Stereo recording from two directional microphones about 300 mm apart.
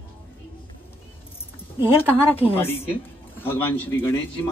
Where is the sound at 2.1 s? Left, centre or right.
Centre.